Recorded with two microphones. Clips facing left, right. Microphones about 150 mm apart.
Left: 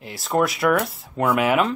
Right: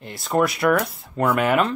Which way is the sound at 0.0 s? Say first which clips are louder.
Even; centre (ahead or behind).